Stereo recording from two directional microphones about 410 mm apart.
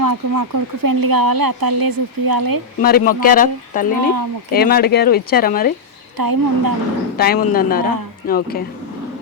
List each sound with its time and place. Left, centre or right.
0.0 s speech: right
2.8 s speech: left
6.1 s speech: right
7.2 s speech: left